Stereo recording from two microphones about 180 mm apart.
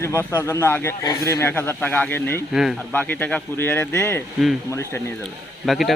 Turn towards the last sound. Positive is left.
turn(degrees=0)  # may be behind; listen again after turning